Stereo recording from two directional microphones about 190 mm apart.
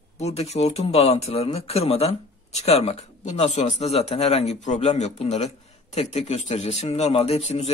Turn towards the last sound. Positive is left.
turn(degrees=35)  # may be behind; listen again after turning